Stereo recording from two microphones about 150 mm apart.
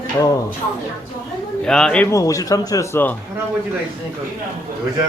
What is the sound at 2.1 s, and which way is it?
Speech, 20° left (ahead or behind).